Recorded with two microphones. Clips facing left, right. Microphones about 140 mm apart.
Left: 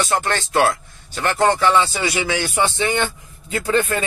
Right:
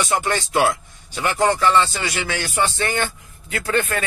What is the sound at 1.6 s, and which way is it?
Speech, 10° left (ahead or behind).